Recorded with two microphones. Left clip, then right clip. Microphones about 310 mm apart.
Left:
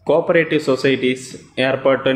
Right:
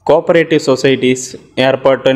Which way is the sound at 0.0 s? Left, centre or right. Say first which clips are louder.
Right 5 dB; right.